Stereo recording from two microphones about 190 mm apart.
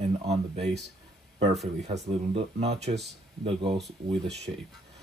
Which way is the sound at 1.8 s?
35° right (ahead or behind).